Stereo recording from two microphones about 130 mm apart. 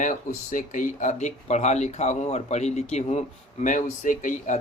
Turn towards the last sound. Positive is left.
turn(degrees=80)